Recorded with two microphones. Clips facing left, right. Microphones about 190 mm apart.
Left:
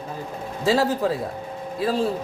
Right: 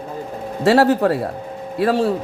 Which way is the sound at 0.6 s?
70° right (ahead or behind).